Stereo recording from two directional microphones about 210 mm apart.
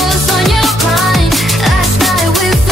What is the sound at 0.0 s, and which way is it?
Music, centre (ahead or behind).